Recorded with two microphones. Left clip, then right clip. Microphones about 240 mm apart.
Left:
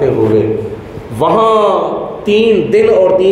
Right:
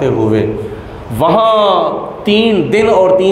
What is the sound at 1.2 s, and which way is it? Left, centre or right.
Speech, right.